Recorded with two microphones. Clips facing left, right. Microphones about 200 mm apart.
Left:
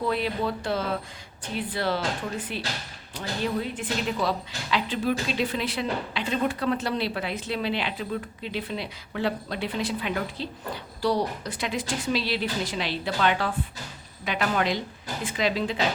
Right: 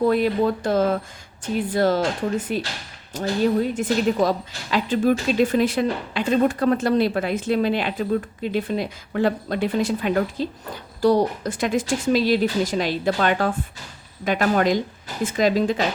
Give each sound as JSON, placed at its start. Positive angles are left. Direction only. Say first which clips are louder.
{"t": 0.0, "sound": "speech", "louder": "right 8 dB", "side_deg": -45}